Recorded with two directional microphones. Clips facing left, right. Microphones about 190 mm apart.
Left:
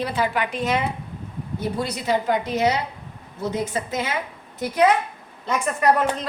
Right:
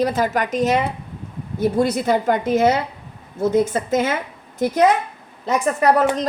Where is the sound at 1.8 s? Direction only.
50° right (ahead or behind).